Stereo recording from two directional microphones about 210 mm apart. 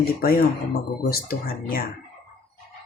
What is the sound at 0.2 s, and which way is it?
Speech, 45° left (ahead or behind).